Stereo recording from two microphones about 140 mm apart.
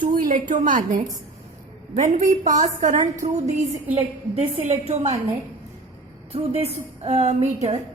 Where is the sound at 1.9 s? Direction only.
65° right (ahead or behind); by 5.2 s 50° right (ahead or behind).